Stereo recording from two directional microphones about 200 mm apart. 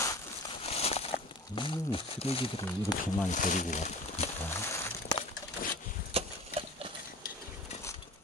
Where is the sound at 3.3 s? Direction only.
40° left (ahead or behind).